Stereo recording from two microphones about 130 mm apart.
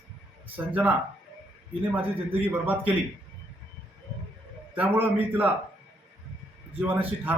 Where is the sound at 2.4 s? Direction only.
15° right (ahead or behind).